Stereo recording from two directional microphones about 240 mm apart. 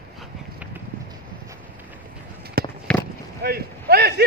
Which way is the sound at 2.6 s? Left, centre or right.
Right.